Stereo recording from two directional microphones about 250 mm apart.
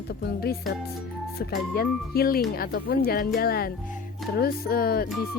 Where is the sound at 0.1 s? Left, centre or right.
Left.